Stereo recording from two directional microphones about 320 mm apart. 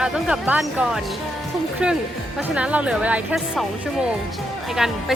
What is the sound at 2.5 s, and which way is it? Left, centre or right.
Speech, centre.